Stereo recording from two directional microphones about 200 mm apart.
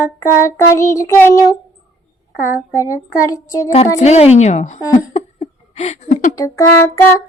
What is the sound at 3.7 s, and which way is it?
A woman's voice, 35° left (ahead or behind).